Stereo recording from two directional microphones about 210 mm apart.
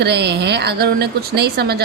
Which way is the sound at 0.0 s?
50° right (ahead or behind).